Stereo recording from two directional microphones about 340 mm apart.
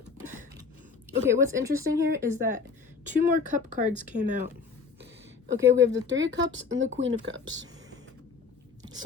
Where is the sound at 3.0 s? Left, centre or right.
Right.